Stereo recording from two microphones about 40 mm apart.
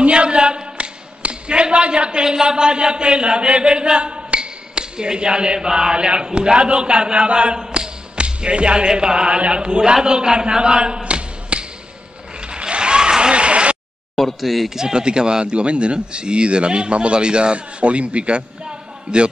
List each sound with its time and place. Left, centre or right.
0.0 s speech: right
12.4 s a sound: right
14.1 s speech: centre
14.8 s speech: centre